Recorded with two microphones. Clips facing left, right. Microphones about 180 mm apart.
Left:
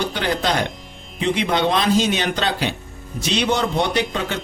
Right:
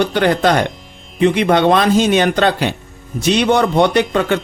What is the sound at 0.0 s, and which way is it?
A man's voice, 60° right (ahead or behind).